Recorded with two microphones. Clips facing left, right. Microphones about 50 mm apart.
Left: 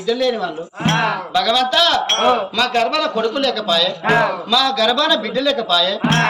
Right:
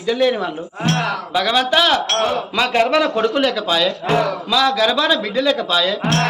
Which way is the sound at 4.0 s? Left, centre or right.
Left.